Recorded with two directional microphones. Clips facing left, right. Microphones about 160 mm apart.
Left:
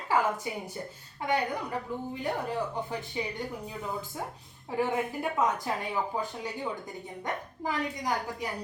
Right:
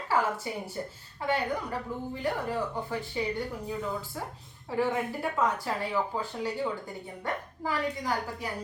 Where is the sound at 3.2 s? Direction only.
15° left (ahead or behind).